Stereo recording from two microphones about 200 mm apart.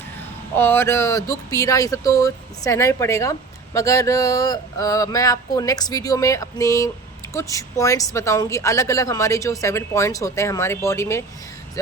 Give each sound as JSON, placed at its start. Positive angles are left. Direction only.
{"t": 0.5, "sound": "a woman's voice", "side_deg": 10}